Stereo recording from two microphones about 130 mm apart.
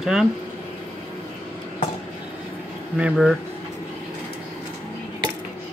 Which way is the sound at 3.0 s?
5° right (ahead or behind).